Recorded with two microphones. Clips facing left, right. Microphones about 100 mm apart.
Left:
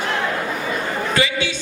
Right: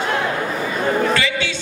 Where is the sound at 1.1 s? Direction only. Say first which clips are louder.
Even; 15° left (ahead or behind).